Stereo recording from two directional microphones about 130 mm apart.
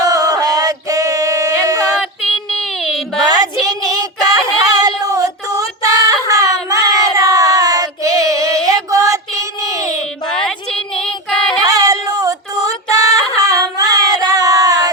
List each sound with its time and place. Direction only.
0.0 s a sound: 25° right (ahead or behind)
3.2 s child singing: 30° right (ahead or behind)
10.3 s child singing: 5° left (ahead or behind)
11.6 s female singing: 25° right (ahead or behind)